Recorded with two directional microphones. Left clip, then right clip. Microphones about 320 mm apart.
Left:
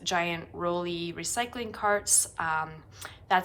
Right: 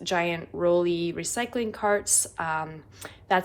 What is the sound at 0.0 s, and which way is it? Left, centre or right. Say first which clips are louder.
A woman's voice: right 2 dB; centre.